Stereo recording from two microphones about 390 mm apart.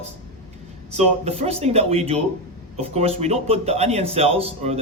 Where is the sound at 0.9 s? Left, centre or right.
Centre.